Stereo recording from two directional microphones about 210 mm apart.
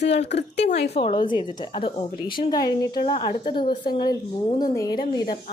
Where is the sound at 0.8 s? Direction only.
30° left (ahead or behind).